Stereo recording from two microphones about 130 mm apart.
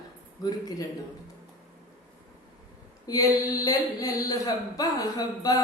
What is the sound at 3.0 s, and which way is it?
Speech, 30° left (ahead or behind).